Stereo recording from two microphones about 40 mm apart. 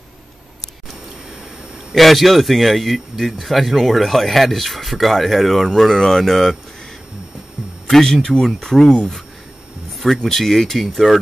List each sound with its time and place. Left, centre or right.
2.0 s speech: centre
7.9 s speech: centre